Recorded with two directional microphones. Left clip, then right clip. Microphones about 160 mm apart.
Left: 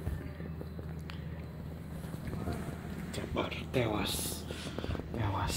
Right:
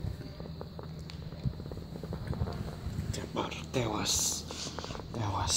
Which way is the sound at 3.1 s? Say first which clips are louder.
Even; 25° right (ahead or behind).